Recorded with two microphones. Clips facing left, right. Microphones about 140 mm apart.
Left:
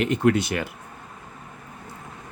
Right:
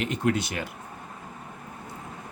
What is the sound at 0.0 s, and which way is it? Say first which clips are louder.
Speech: left 6 dB; 60° left (ahead or behind).